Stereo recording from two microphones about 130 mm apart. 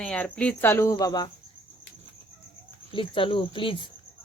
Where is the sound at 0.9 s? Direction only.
30° left (ahead or behind).